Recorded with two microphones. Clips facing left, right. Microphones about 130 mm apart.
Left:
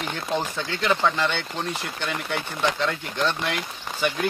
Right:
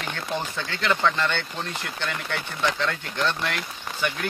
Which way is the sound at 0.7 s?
15° left (ahead or behind).